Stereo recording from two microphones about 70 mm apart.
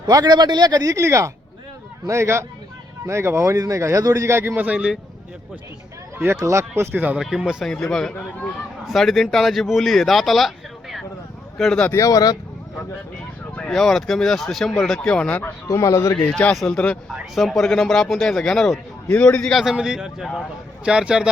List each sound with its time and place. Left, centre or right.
0.1 s speech: right
4.5 s speech: centre
6.1 s speech: right
6.9 s speech: right
7.2 s speech: centre
7.7 s speech: centre
11.9 s speech: left
13.7 s speech: centre
15.6 s speech: left
16.1 s speech: centre
17.3 s speech: centre
19.0 s speech: left
19.7 s a man's voice: centre